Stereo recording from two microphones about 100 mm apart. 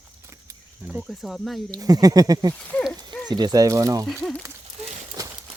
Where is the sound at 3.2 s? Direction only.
45° right (ahead or behind).